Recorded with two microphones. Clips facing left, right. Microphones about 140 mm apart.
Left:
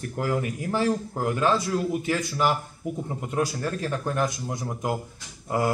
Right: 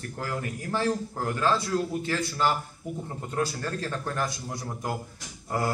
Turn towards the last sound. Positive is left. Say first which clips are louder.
# left 4 dB
turn(degrees=15)  # may be behind; listen again after turning